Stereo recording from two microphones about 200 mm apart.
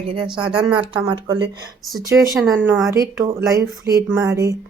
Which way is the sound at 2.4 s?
Centre (ahead or behind).